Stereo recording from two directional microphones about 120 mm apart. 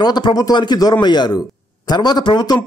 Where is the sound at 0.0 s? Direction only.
40° left (ahead or behind).